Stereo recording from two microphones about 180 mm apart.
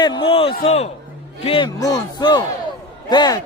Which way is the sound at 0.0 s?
25° left (ahead or behind).